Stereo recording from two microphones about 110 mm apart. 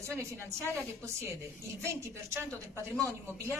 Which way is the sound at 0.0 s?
25° right (ahead or behind).